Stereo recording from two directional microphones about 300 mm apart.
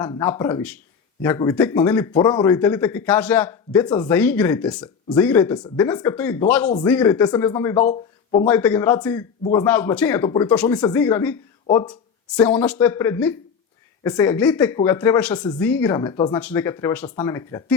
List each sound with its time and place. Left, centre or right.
0.0 s speech: centre
8.4 s speech: centre
12.4 s speech: centre